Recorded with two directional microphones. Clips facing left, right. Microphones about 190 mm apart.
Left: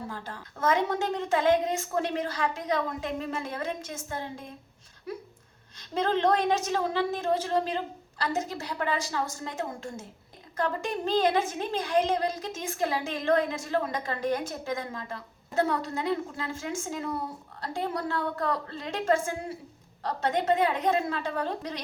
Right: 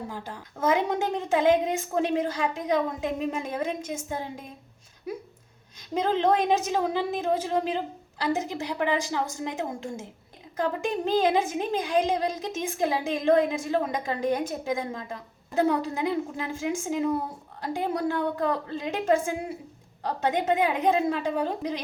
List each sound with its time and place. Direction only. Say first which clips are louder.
0.1 s a woman's voice: right 2 dB; 15° right (ahead or behind)
5.9 s a woman's voice: right 2 dB; 10° right (ahead or behind)